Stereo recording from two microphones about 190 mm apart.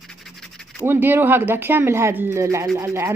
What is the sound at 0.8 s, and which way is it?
A woman's voice, 10° right (ahead or behind).